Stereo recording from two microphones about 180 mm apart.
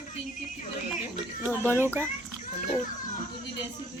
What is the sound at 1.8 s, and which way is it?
Speech, 15° right (ahead or behind).